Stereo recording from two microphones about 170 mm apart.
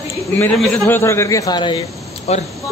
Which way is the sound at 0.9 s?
15° left (ahead or behind).